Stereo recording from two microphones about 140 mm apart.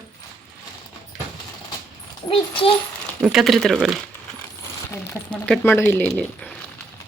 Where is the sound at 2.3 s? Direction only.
40° left (ahead or behind).